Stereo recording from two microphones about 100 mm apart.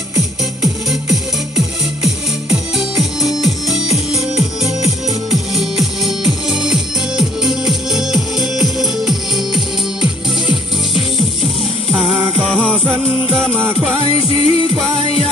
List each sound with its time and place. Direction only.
0.6 s music: centre (ahead or behind)
5.3 s music: centre (ahead or behind)
12.7 s music: 15° right (ahead or behind)
14.0 s music: 70° left (ahead or behind)